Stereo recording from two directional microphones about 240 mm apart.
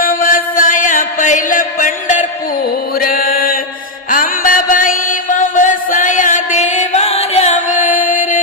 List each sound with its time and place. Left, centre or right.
0.0 s music: left
3.0 s mantra: left
4.1 s music: left